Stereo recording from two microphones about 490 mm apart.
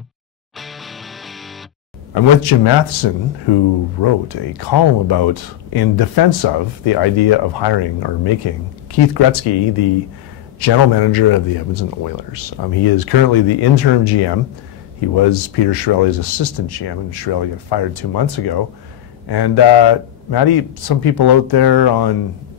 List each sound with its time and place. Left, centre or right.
0.6 s music: centre
2.1 s speech: left